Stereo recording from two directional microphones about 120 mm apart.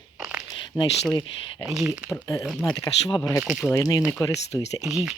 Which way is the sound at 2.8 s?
35° left (ahead or behind).